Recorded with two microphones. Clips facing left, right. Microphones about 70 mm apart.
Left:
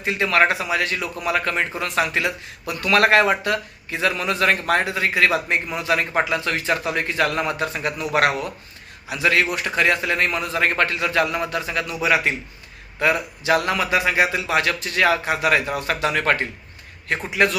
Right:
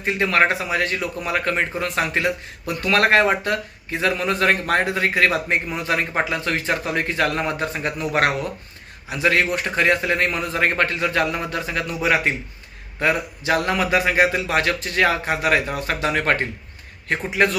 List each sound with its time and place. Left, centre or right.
0.0 s a man's voice: right
15.6 s speech: left
15.9 s a man's voice: right